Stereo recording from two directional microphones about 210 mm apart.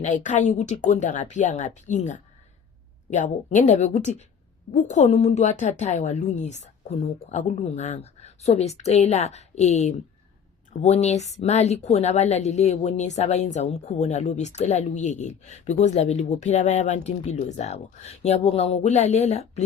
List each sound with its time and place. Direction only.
0.0 s a woman's voice: 35° left (ahead or behind)